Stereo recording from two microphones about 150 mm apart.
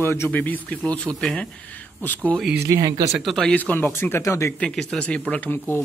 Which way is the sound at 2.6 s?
20° right (ahead or behind).